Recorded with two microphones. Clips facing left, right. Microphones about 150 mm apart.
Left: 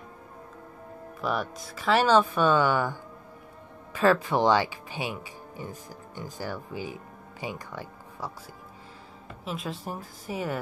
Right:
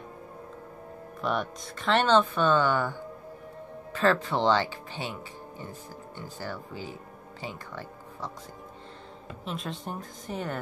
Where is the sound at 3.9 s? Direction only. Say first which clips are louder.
Left 2 dB; 10° left (ahead or behind).